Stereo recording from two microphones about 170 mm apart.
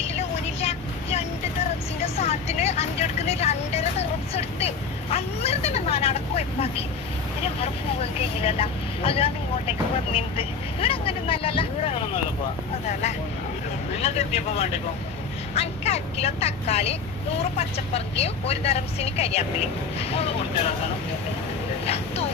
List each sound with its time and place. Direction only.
0.1 s vehicle: 40° left (ahead or behind)
2.0 s vehicle: 40° left (ahead or behind)
8.2 s vehicle: 35° left (ahead or behind)
14.0 s speech: 40° left (ahead or behind)
21.8 s vehicle: 35° left (ahead or behind)